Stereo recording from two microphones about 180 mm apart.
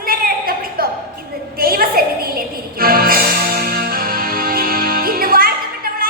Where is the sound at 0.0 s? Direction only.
55° right (ahead or behind).